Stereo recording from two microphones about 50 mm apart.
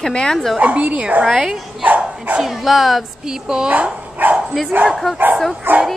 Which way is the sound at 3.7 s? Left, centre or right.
Right.